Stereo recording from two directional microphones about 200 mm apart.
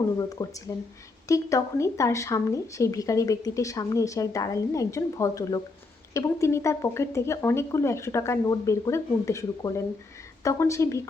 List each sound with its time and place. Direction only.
0.2 s speech: 15° left (ahead or behind)